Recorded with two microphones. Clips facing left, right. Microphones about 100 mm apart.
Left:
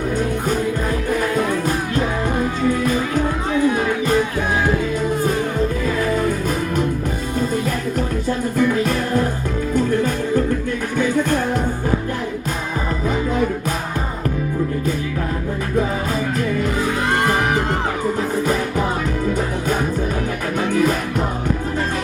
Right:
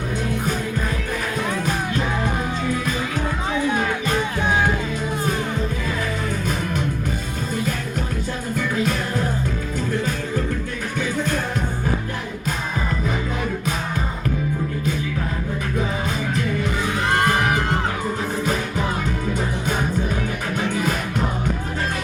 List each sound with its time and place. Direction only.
3.5 s music: centre (ahead or behind)
8.5 s music: 45° left (ahead or behind)